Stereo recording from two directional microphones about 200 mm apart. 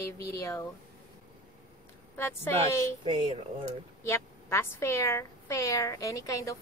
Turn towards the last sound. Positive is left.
turn(degrees=15)  # may be behind; listen again after turning